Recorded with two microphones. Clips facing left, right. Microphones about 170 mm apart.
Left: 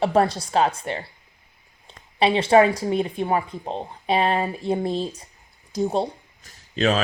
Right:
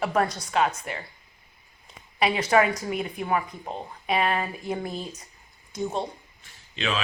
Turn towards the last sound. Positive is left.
turn(degrees=40)  # may be behind; listen again after turning